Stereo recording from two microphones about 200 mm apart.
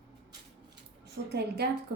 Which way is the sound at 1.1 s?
55° right (ahead or behind).